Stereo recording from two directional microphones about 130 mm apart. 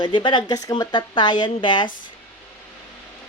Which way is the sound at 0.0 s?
40° left (ahead or behind).